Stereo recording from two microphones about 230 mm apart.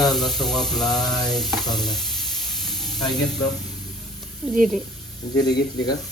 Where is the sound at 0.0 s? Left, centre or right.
Centre.